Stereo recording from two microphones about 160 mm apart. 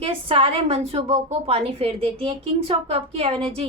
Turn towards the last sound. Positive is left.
turn(degrees=-35)  # may be behind; listen again after turning